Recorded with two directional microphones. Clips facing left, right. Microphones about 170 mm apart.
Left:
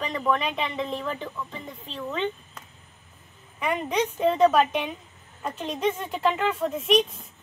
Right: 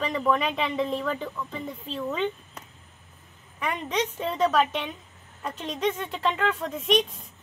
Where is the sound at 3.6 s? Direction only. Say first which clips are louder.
Left 3 dB; 10° left (ahead or behind).